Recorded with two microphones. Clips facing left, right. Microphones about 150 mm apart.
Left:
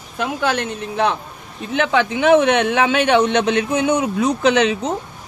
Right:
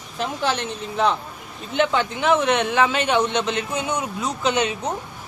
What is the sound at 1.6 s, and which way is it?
Speech, 80° left.